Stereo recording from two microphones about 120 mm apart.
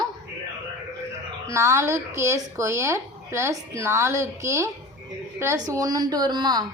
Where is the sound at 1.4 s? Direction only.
25° right (ahead or behind).